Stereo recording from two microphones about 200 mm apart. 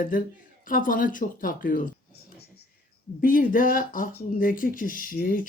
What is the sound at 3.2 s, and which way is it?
Speech, 45° left (ahead or behind).